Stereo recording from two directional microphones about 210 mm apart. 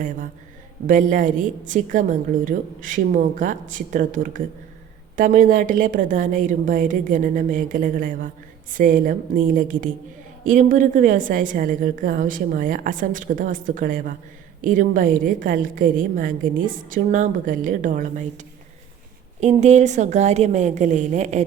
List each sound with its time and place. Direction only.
0.9 s a woman's voice: 40° right (ahead or behind)